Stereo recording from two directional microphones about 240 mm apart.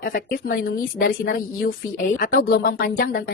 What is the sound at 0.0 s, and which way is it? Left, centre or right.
A woman's voice, left.